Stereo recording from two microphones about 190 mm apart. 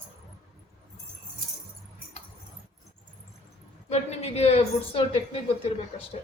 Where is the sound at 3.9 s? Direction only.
35° left (ahead or behind).